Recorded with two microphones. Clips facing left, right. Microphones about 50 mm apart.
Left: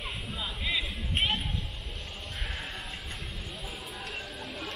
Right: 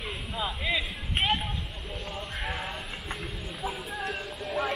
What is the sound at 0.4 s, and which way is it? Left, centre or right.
Music, centre.